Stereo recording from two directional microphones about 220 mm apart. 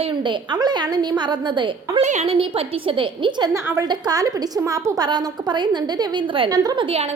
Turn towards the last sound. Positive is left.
turn(degrees=-25)  # may be behind; listen again after turning